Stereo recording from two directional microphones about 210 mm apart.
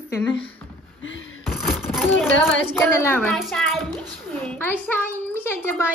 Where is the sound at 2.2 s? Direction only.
10° left (ahead or behind).